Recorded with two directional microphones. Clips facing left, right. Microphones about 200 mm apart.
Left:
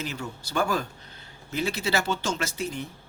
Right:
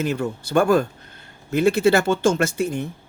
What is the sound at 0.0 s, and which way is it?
Speech, 55° right (ahead or behind).